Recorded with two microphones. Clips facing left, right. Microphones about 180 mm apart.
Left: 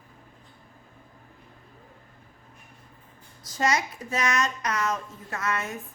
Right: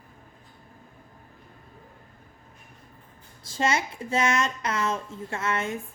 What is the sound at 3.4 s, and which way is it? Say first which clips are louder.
A woman's voice: even; 25° right (ahead or behind).